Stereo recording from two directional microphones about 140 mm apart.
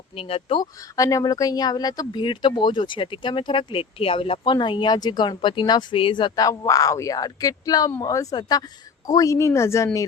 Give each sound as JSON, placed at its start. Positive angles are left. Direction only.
{"t": 0.2, "sound": "speech", "side_deg": 45}
{"t": 0.6, "sound": "a woman's voice", "side_deg": 25}